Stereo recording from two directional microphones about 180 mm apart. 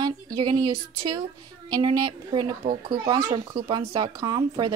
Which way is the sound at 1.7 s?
20° right (ahead or behind).